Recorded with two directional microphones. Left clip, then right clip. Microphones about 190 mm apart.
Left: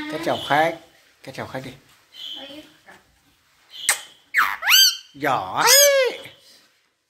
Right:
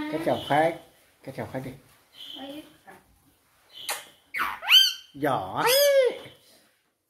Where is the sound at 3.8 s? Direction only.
5° right (ahead or behind).